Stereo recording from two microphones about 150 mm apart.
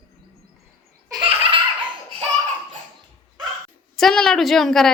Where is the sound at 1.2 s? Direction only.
35° right (ahead or behind).